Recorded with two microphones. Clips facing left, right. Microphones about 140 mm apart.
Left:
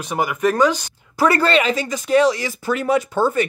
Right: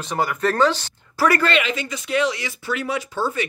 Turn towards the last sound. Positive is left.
turn(degrees=50)  # may be behind; listen again after turning